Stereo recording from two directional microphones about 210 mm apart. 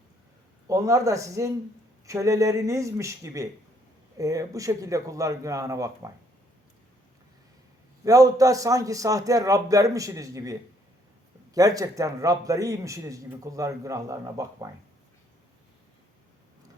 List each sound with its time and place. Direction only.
0.7 s a man's voice: 15° right (ahead or behind)
8.0 s a man's voice: 15° right (ahead or behind)